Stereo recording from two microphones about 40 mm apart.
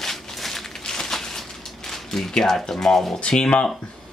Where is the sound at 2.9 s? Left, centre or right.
Left.